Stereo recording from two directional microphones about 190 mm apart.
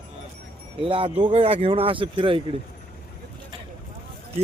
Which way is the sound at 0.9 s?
25° right (ahead or behind).